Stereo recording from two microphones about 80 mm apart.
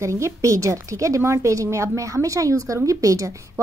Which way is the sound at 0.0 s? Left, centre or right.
Right.